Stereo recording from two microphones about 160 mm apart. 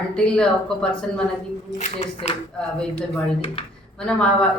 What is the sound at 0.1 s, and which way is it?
A woman's voice, 5° left (ahead or behind).